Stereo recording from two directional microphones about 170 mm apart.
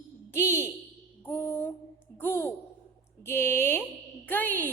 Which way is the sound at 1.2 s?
10° left (ahead or behind).